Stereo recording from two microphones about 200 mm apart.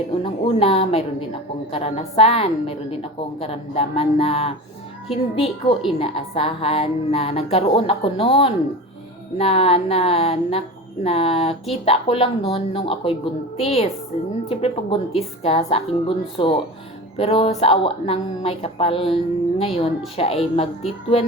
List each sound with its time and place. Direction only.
0.1 s a woman's voice: 25° left (ahead or behind)